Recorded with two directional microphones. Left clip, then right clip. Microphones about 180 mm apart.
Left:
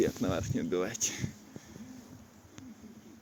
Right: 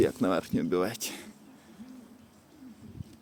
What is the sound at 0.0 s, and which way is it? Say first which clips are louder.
Speech: right 5 dB; 50° right (ahead or behind).